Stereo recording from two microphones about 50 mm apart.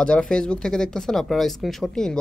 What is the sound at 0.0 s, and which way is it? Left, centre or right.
Speech, centre.